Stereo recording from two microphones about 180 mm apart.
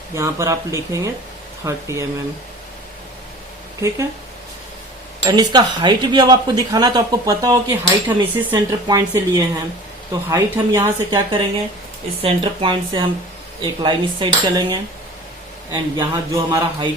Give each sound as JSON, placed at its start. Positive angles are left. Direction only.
{"t": 0.1, "sound": "speech", "side_deg": -15}
{"t": 3.8, "sound": "speech", "side_deg": -15}
{"t": 5.2, "sound": "speech", "side_deg": -25}